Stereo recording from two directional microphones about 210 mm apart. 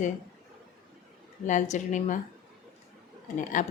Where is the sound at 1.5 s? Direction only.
35° left (ahead or behind).